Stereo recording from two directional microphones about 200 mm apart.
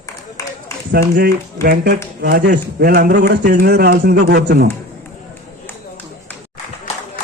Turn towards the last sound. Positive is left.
turn(degrees=30)  # may be behind; listen again after turning